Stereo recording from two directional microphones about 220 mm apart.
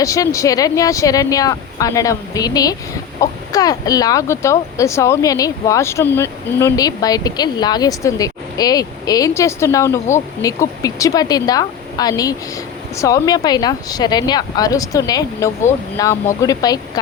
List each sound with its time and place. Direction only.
0.0 s speech: 15° left (ahead or behind)